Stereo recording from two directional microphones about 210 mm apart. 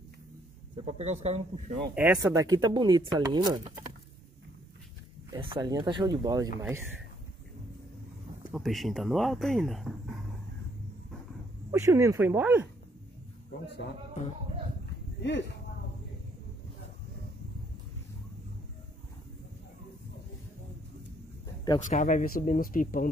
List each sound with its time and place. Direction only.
0.8 s speech: 30° right (ahead or behind)
2.1 s speech: 15° right (ahead or behind)
5.3 s speech: 20° right (ahead or behind)
8.5 s speech: centre (ahead or behind)
11.7 s speech: 15° right (ahead or behind)
15.2 s speech: 55° left (ahead or behind)
21.7 s speech: 35° left (ahead or behind)